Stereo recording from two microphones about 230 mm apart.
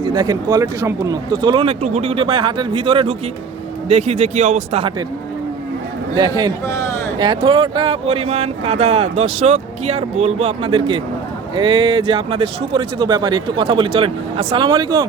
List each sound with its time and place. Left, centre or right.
0.0 s speech: centre
6.1 s speech: centre
6.7 s a sound: centre
7.2 s speech: centre